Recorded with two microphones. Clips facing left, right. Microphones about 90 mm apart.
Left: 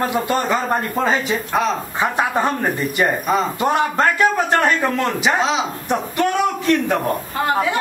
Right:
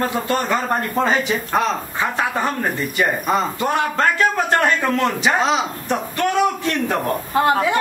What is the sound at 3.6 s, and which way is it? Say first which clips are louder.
A man's voice: left 2 dB; 15° left (ahead or behind).